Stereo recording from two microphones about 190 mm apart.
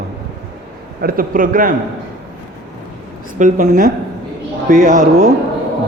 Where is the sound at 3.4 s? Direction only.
45° right (ahead or behind).